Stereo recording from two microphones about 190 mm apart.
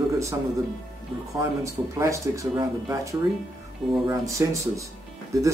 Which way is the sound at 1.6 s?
15° right (ahead or behind).